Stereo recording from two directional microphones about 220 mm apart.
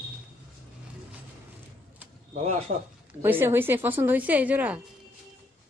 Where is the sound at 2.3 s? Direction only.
30° right (ahead or behind).